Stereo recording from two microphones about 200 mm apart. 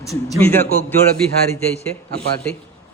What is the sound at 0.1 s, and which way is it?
Speech, 15° left (ahead or behind).